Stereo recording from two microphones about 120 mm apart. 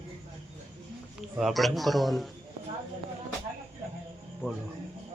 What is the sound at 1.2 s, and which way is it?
A man's voice, 5° right (ahead or behind).